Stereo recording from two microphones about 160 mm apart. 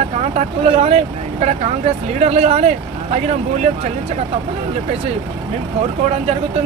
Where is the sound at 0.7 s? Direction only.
40° right (ahead or behind).